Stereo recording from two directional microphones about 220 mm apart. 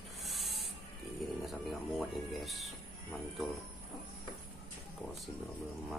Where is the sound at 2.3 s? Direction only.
Centre (ahead or behind).